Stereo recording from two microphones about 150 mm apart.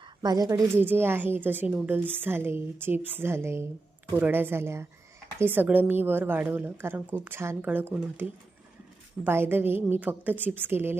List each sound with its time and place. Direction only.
0.0 s a woman's voice: 25° right (ahead or behind)
0.8 s a woman's voice: 15° right (ahead or behind)